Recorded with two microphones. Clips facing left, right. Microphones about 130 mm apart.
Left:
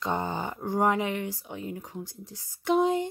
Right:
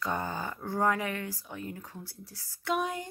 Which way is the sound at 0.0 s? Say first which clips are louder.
Left 3 dB; 20° left (ahead or behind).